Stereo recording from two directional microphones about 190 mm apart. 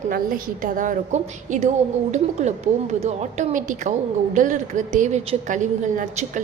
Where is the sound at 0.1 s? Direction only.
45° right (ahead or behind).